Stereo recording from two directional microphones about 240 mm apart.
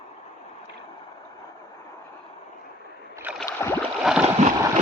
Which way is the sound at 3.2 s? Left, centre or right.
Centre.